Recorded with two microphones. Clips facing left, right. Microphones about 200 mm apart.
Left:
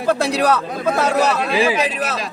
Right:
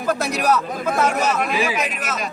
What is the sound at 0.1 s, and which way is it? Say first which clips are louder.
A man's voice: left 3 dB; 30° left (ahead or behind).